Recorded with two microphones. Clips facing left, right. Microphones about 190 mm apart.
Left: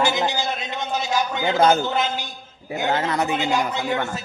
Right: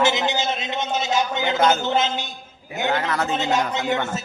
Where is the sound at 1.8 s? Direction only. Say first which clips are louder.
Right 2 dB; 20° right (ahead or behind).